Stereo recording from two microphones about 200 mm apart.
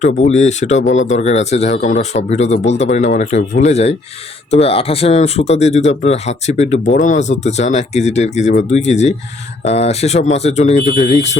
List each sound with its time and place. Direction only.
0.0 s speech: 35° left (ahead or behind)